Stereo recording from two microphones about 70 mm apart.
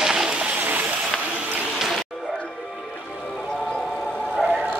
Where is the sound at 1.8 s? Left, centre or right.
Centre.